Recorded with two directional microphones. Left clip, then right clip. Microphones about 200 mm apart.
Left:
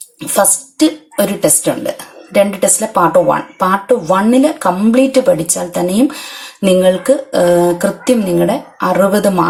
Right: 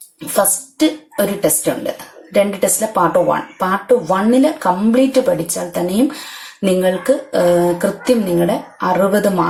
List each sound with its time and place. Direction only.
0.3 s speech: 30° left (ahead or behind)